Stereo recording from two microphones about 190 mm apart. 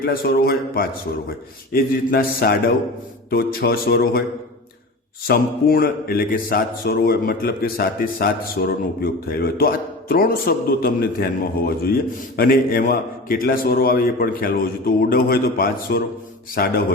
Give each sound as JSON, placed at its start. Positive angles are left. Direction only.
{"t": 0.0, "sound": "a man's voice", "side_deg": 50}
{"t": 5.3, "sound": "a man's voice", "side_deg": 50}